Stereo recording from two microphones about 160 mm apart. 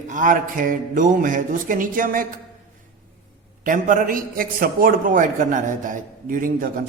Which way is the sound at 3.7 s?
55° right (ahead or behind).